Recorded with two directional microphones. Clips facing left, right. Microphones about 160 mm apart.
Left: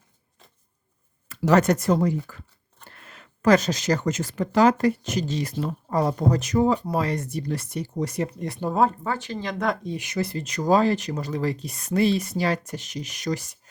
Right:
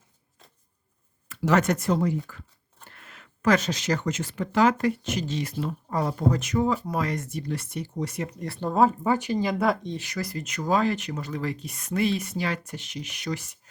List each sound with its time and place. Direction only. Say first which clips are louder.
1.3 s speech: left 3 dB; 35° left (ahead or behind)
8.4 s speech: left 2 dB; 15° left (ahead or behind)
8.7 s speech: right 1 dB; centre (ahead or behind)
9.0 s speech: right 5 dB; 15° right (ahead or behind)
9.8 s speech: left 2 dB; 10° left (ahead or behind)
10.1 s speech: left 5 dB; 25° left (ahead or behind)